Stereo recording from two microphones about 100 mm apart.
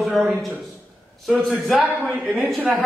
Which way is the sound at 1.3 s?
5° right (ahead or behind).